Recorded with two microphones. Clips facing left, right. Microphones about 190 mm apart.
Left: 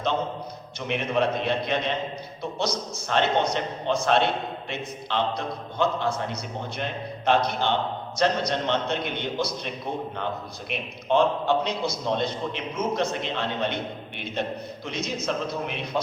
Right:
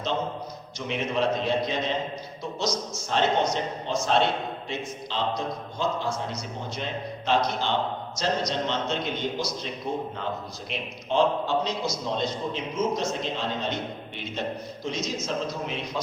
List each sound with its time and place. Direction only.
0.9 s a man's voice: 60° left (ahead or behind)
14.8 s a man's voice: 60° left (ahead or behind)